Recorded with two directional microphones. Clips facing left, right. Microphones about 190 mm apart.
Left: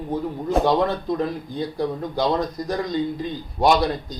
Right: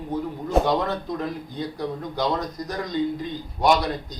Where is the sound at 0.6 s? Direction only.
Centre (ahead or behind).